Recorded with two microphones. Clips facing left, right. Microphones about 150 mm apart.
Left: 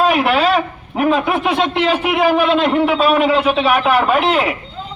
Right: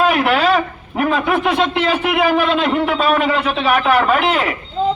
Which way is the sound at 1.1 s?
Centre (ahead or behind).